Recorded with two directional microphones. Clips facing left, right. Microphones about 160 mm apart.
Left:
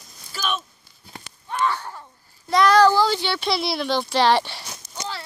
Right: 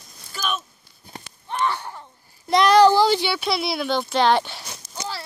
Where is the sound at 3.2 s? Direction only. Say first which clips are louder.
Even; 5° right (ahead or behind).